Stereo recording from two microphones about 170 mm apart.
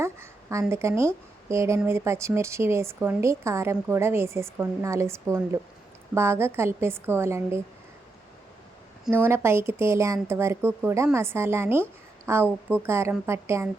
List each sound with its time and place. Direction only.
0.0 s a sound: 15° right (ahead or behind)
0.7 s speech: 15° right (ahead or behind)
9.0 s speech: 15° right (ahead or behind)